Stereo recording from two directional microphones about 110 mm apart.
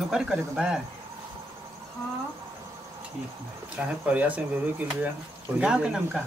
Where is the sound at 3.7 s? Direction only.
15° right (ahead or behind).